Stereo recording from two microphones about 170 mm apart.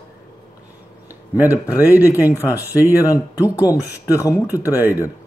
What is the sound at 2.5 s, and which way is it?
Speech, 10° right (ahead or behind).